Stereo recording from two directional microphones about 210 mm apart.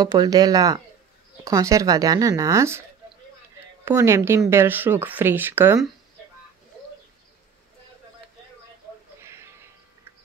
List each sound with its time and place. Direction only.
0.0 s speech: 15° right (ahead or behind)
3.8 s speech: 10° right (ahead or behind)
9.2 s a sound: 10° right (ahead or behind)